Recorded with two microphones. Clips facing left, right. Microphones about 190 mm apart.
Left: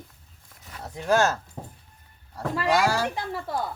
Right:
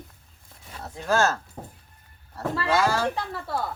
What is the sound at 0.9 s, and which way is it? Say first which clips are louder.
Speech: left 1 dB; 20° left (ahead or behind).